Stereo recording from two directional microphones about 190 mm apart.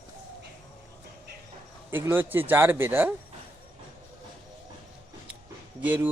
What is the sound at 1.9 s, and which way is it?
Speech, 10° right (ahead or behind).